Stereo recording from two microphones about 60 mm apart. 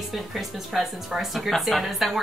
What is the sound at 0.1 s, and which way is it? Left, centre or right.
Speech, centre.